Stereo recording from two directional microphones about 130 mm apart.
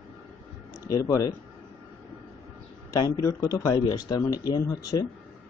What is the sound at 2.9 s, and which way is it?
Speech, 30° left (ahead or behind).